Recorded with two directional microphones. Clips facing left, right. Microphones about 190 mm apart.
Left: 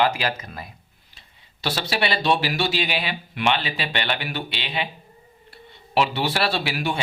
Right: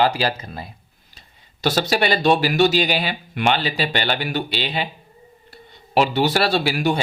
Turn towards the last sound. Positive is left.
turn(degrees=-40)  # may be behind; listen again after turning